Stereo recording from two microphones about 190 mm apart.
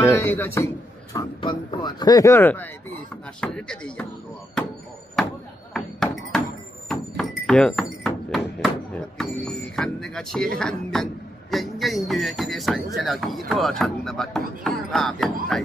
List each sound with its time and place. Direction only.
0.2 s speech: 10° left (ahead or behind)
1.1 s speech: 25° left (ahead or behind); by 4.1 s 5° left (ahead or behind)
5.7 s a sound: centre (ahead or behind)
10.6 s speech: 5° left (ahead or behind)